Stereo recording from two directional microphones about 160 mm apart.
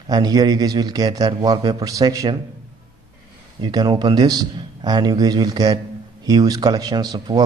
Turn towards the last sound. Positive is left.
turn(degrees=-25)  # may be behind; listen again after turning